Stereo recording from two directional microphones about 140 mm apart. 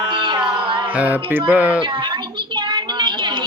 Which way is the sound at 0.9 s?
10° right (ahead or behind).